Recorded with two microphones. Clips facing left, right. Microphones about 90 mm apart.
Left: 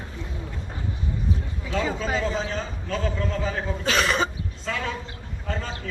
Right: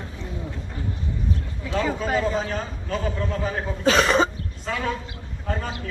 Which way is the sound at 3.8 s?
35° right (ahead or behind).